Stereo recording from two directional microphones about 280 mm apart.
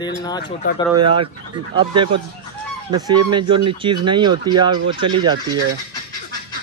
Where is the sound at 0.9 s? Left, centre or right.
Centre.